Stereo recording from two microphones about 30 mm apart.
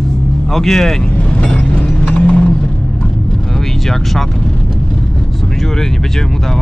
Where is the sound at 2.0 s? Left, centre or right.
Left.